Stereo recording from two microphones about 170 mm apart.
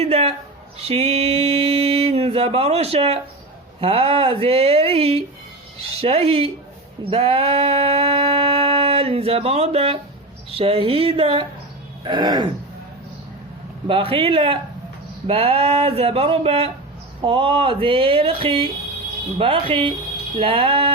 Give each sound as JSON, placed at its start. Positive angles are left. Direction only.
{"t": 0.0, "sound": "a sound", "side_deg": -35}
{"t": 0.8, "sound": "mantra", "side_deg": -35}
{"t": 3.8, "sound": "speech", "side_deg": -35}
{"t": 7.0, "sound": "a sound", "side_deg": -35}
{"t": 10.5, "sound": "speech", "side_deg": -35}
{"t": 13.8, "sound": "speech", "side_deg": -30}